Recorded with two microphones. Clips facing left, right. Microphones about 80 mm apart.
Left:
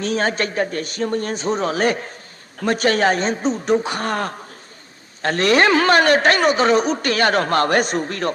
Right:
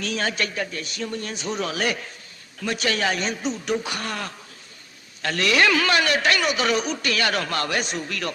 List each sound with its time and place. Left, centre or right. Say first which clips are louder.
0.0 s a man's voice: left 6 dB; left